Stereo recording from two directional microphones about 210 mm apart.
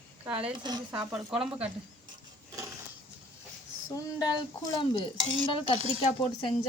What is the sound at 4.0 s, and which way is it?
Speech, 15° left (ahead or behind).